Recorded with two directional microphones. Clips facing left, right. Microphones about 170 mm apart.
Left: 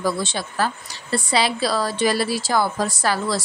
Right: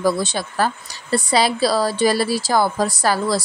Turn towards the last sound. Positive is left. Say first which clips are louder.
# right 3 dB
turn(degrees=-35)  # may be behind; listen again after turning